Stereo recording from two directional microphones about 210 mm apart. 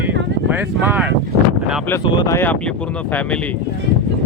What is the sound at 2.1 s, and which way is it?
Speech, 15° left (ahead or behind).